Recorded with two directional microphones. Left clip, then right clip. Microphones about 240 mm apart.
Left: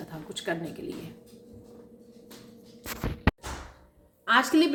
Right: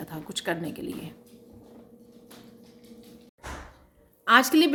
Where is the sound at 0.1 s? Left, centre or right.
Right.